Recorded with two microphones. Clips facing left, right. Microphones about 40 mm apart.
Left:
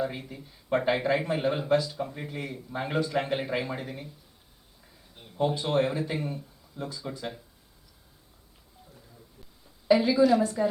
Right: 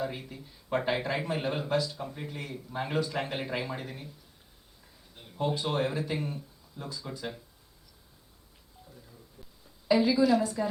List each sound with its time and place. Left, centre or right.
0.0 s speech: centre
5.4 s speech: centre
9.9 s speech: centre